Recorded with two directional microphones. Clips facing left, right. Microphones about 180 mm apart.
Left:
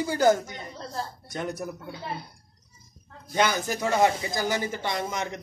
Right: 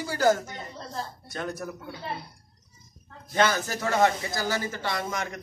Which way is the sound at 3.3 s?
15° left (ahead or behind).